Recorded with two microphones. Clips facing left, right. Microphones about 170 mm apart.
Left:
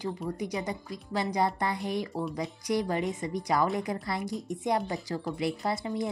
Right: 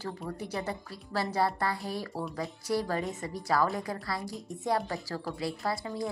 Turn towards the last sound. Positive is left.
turn(degrees=20)  # may be behind; listen again after turning